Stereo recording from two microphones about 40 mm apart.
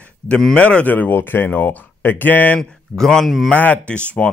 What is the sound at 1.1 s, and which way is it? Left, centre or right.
Speech, left.